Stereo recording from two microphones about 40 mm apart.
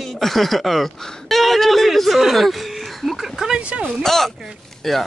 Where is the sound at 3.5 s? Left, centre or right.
Right.